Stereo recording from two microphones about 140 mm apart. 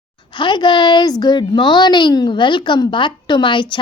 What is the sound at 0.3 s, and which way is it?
A woman's voice, 35° left (ahead or behind).